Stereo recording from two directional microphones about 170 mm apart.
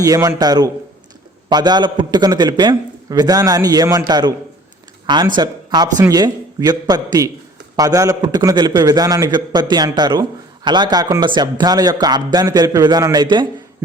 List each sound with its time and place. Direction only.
0.0 s a man's voice: 20° right (ahead or behind)